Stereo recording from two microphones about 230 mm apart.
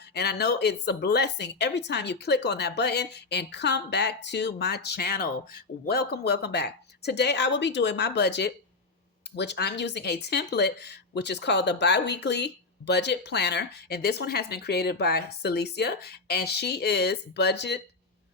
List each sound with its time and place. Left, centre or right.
0.1 s speech: left